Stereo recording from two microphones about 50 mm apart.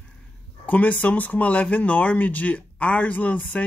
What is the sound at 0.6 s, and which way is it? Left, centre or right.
Speech, left.